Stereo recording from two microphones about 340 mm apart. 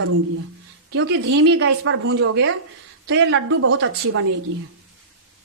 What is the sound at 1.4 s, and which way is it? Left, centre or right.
A woman's voice, right.